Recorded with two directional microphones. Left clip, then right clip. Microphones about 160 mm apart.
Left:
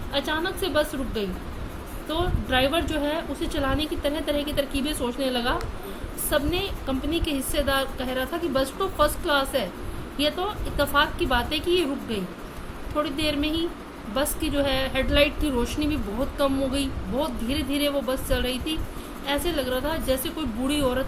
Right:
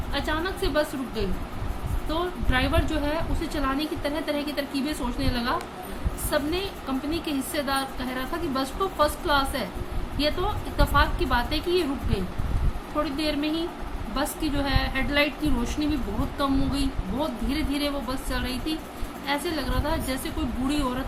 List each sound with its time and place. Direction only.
0.1 s a woman's voice: 30° left (ahead or behind)
13.0 s a woman's voice: 30° left (ahead or behind)